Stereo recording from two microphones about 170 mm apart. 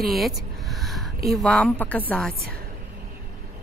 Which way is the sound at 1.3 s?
5° left (ahead or behind).